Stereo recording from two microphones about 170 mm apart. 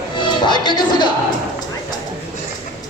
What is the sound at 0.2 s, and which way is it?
Speech, 25° left (ahead or behind).